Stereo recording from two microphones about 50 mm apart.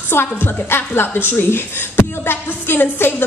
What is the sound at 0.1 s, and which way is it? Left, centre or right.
A woman's voice, left.